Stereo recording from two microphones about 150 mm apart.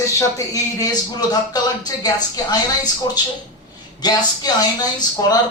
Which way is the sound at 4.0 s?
25° left (ahead or behind).